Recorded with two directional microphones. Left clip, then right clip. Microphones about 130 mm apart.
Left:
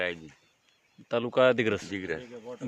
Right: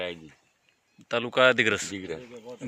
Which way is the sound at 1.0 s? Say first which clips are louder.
Right 2 dB; 20° left (ahead or behind).